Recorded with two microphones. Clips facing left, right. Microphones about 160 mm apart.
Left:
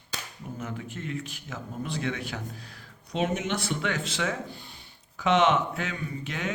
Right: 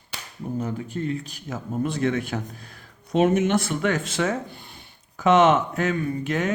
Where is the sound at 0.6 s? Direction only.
35° right (ahead or behind).